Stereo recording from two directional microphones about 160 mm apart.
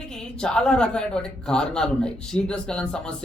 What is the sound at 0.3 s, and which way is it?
A man's voice, 5° left (ahead or behind).